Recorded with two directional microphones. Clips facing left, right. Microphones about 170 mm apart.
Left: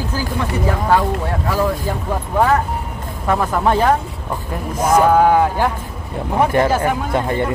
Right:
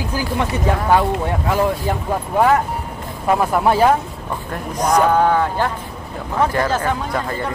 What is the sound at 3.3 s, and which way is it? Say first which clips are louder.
Speech: right 1 dB; 10° right (ahead or behind).